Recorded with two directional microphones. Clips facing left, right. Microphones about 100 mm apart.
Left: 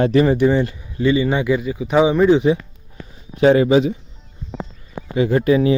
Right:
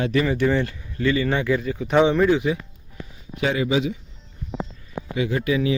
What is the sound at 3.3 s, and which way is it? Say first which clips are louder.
Speech: left 9 dB; 40° left (ahead or behind).